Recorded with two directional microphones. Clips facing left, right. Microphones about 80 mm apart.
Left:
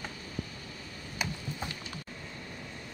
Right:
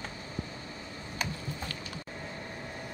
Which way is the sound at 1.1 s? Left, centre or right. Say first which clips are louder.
Even; centre.